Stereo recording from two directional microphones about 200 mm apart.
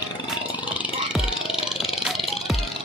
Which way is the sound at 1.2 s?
25° left (ahead or behind).